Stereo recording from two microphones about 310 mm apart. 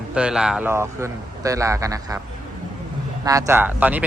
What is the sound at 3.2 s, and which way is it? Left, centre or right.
Speech, centre.